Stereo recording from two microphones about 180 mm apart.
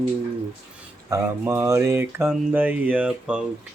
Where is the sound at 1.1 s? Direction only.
15° right (ahead or behind).